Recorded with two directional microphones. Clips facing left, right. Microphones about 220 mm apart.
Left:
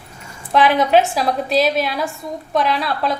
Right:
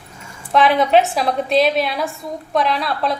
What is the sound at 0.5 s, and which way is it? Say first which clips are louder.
A woman's voice: even; centre (ahead or behind).